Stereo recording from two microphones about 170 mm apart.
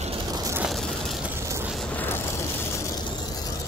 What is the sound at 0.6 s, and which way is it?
Vehicle, centre (ahead or behind).